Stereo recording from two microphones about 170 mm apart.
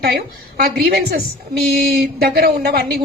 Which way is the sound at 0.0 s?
65° right (ahead or behind).